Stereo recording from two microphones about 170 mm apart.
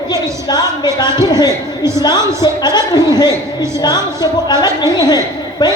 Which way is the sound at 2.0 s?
25° left (ahead or behind).